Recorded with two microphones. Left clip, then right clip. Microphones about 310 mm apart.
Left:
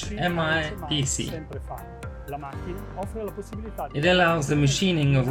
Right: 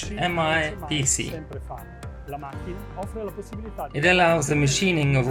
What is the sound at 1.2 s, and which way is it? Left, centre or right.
Speech, centre.